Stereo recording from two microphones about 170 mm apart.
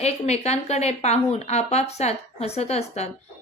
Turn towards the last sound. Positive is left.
turn(degrees=40)  # may be behind; listen again after turning